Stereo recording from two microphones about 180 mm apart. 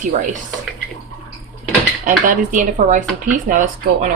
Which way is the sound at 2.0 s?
45° right (ahead or behind).